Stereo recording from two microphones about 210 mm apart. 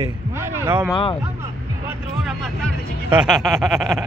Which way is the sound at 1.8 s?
Centre (ahead or behind).